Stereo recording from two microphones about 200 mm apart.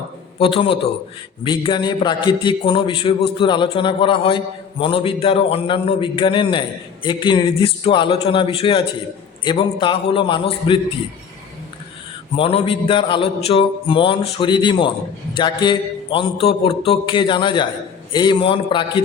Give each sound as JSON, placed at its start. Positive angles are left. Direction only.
{"t": 0.3, "sound": "a man's voice", "side_deg": 25}
{"t": 12.4, "sound": "a man's voice", "side_deg": 25}